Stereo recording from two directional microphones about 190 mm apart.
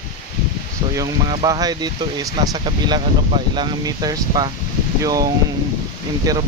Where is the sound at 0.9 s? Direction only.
20° right (ahead or behind).